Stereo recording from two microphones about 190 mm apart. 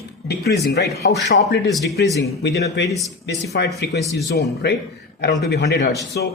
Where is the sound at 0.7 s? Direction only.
60° left (ahead or behind).